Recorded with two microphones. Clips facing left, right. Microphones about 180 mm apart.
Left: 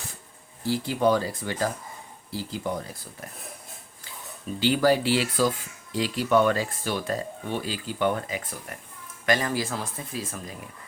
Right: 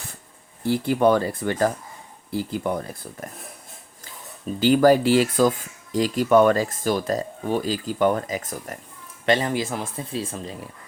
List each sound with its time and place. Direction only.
0.6 s speech: 55° right (ahead or behind)
4.6 s speech: 45° right (ahead or behind)
9.2 s speech: 25° right (ahead or behind)